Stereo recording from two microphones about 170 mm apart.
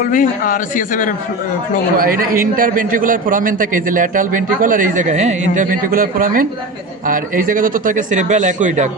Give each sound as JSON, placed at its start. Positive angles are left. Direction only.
{"t": 0.0, "sound": "a man's voice", "side_deg": 50}
{"t": 2.0, "sound": "a man's voice", "side_deg": -55}